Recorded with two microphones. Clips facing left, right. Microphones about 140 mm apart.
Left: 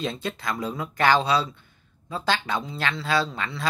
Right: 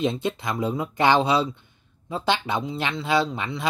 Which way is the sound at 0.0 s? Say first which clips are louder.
Right 5 dB; 20° right (ahead or behind).